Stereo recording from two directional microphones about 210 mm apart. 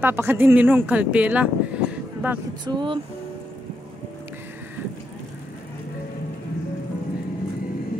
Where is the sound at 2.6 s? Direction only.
20° right (ahead or behind).